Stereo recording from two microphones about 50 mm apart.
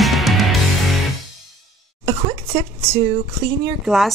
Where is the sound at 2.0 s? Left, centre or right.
Right.